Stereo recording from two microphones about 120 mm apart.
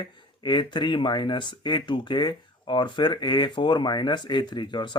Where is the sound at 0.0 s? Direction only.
40° left (ahead or behind).